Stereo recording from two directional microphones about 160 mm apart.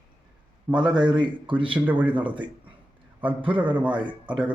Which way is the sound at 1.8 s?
10° right (ahead or behind).